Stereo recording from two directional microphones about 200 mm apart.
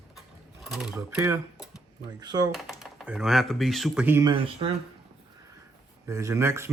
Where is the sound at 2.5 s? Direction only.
Centre (ahead or behind).